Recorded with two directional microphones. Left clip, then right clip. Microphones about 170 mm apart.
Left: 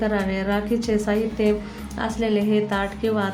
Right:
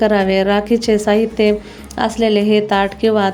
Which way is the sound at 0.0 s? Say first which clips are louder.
Right 11 dB; 40° right (ahead or behind).